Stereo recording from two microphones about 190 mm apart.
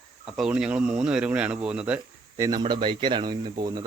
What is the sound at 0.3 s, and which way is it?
Speech, 5° right (ahead or behind).